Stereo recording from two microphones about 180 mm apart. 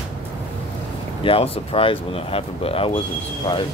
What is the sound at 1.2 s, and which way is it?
Speech, 35° left (ahead or behind).